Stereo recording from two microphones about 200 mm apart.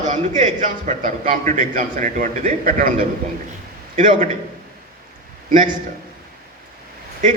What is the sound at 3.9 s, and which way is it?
Speech, 40° right (ahead or behind).